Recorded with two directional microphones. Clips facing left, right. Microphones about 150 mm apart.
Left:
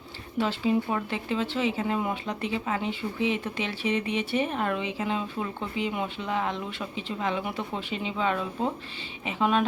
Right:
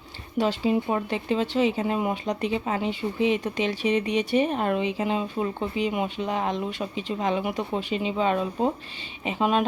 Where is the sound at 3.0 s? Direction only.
30° right (ahead or behind).